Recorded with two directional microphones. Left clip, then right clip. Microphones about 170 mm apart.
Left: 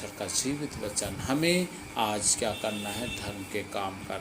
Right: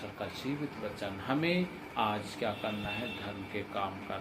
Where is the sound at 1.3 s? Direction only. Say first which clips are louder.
Left 5 dB; 65° left (ahead or behind).